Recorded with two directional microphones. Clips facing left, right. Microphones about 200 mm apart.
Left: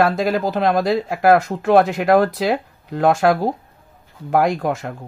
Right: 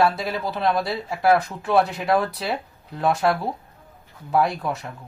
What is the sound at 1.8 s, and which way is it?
Speech, 85° left.